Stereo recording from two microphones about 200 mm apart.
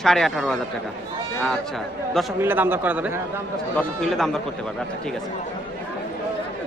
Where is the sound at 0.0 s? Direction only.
Centre (ahead or behind).